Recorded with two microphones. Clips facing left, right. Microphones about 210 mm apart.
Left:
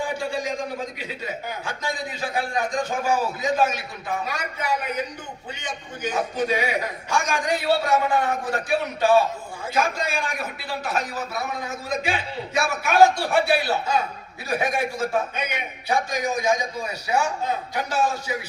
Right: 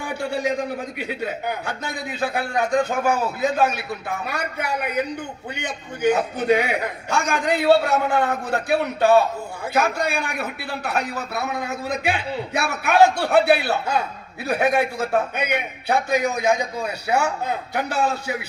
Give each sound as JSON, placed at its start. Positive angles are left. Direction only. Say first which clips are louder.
{"t": 0.0, "sound": "a man's voice", "louder": "right 2 dB", "side_deg": -60}